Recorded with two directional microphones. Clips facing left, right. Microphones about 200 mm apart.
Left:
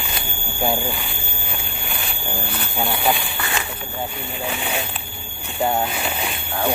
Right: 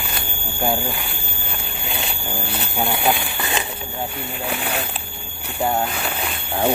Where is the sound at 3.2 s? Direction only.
20° right (ahead or behind).